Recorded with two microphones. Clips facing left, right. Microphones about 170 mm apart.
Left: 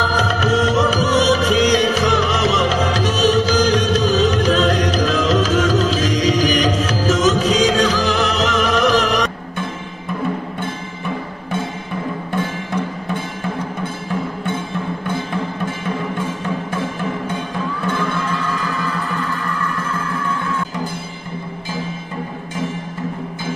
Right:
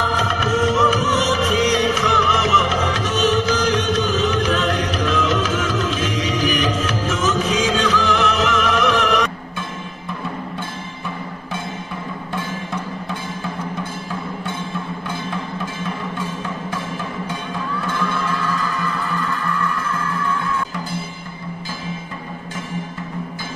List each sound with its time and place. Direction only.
0.1 s music: 35° left (ahead or behind)